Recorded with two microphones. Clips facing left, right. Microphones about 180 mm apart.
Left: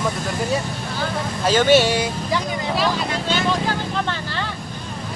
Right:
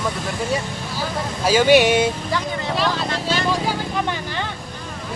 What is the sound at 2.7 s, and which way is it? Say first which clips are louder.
Speech: even; centre (ahead or behind).